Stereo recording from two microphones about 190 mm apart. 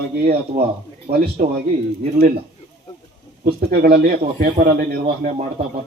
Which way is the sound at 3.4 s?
55° right (ahead or behind).